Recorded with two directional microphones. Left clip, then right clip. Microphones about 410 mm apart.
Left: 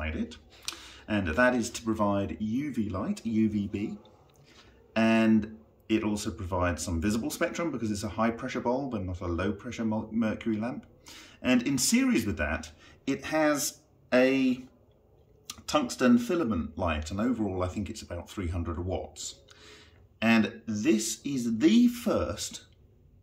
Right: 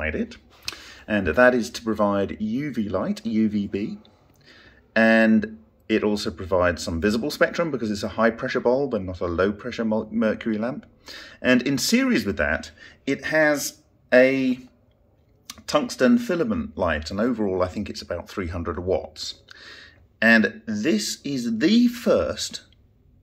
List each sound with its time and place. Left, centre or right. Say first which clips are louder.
0.1 s a sound: right 8 dB; centre
1.0 s speech: right 8 dB; centre
16.3 s speech: right 5 dB; centre